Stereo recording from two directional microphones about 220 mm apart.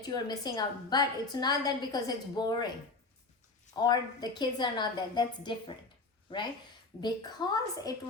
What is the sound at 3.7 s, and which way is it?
A woman's voice, 20° left (ahead or behind).